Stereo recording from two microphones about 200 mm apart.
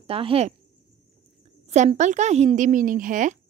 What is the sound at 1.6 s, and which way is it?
A woman's voice, 35° right (ahead or behind).